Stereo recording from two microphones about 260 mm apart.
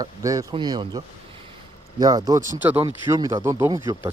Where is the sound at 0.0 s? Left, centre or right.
Centre.